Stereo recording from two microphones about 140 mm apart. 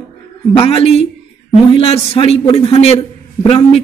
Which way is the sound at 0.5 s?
45° left (ahead or behind).